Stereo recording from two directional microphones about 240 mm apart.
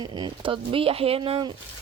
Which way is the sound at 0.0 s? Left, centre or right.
Centre.